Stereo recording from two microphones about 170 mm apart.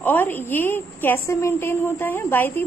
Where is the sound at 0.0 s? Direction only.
10° left (ahead or behind).